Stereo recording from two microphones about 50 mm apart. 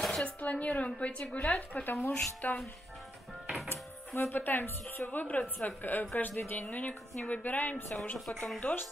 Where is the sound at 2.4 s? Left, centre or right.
Left.